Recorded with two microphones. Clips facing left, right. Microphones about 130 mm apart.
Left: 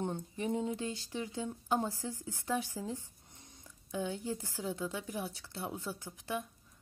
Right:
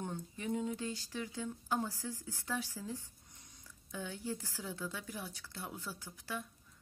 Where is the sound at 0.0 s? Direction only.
25° left (ahead or behind).